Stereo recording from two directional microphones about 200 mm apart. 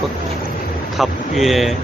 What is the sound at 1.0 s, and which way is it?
Speech, centre (ahead or behind).